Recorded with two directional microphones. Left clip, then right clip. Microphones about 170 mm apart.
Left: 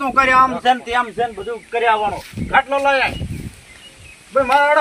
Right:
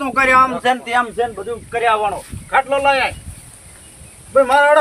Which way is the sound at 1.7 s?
5° right (ahead or behind).